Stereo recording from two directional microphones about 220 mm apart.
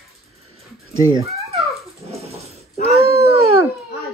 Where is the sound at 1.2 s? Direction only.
30° right (ahead or behind).